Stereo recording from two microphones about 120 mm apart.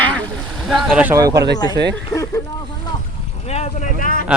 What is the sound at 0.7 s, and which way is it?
Speech, centre (ahead or behind).